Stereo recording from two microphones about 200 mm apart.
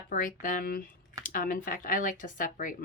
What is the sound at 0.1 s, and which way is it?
Speech, 40° left (ahead or behind).